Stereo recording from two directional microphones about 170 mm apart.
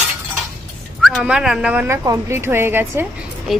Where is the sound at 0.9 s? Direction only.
Centre (ahead or behind).